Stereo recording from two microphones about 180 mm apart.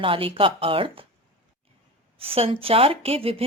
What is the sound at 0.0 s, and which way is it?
Speech, 30° right (ahead or behind).